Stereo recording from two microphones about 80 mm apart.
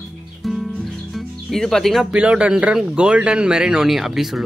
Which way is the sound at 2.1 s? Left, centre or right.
Centre.